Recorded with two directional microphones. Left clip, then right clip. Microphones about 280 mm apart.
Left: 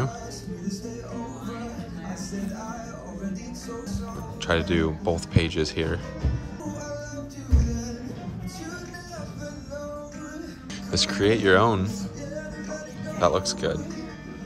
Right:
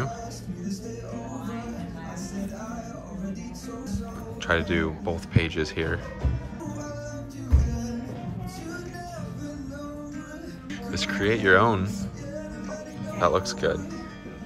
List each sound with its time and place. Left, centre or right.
4.5 s speech: centre
7.5 s music: left
10.9 s speech: centre
11.8 s speech: left
13.2 s speech: centre